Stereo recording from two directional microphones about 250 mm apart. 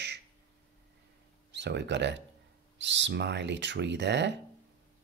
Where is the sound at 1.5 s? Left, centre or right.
Right.